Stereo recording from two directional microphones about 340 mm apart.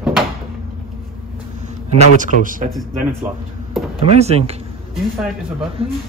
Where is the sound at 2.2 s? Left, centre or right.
Right.